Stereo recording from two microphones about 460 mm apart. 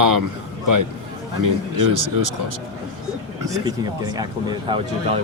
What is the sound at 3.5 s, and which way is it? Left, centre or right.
Speech, centre.